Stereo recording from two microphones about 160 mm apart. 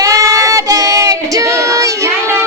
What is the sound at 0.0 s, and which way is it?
Child singing, 20° right (ahead or behind).